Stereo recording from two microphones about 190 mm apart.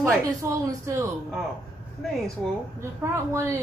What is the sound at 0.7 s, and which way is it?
Speech, 15° right (ahead or behind).